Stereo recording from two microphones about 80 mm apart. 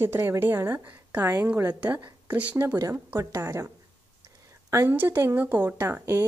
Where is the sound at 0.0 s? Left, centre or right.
Right.